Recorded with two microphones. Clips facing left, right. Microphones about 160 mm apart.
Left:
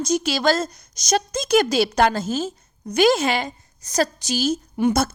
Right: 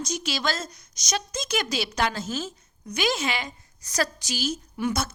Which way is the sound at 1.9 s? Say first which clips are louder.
Left 8 dB; 50° left (ahead or behind).